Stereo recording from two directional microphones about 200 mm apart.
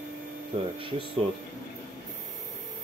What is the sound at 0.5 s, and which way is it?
Speech, 30° right (ahead or behind).